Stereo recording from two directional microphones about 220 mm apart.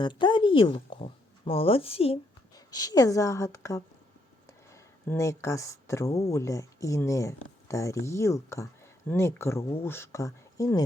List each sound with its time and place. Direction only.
0.0 s speech: 20° left (ahead or behind)